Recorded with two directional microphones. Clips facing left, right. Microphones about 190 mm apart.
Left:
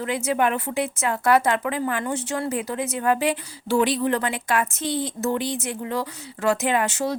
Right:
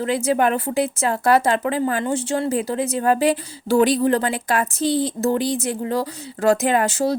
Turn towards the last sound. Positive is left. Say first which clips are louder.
# right 4 dB
turn(degrees=-35)  # may be behind; listen again after turning